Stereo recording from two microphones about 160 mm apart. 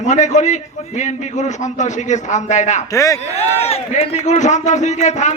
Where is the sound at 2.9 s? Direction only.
20° left (ahead or behind).